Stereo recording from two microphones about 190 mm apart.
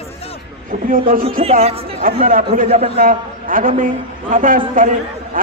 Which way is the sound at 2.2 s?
45° right (ahead or behind).